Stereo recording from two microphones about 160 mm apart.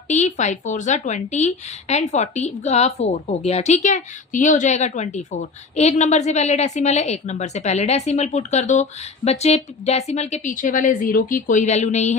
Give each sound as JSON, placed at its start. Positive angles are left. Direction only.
{"t": 0.1, "sound": "speech", "side_deg": 45}